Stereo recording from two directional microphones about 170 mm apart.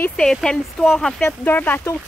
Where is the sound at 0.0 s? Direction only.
5° left (ahead or behind).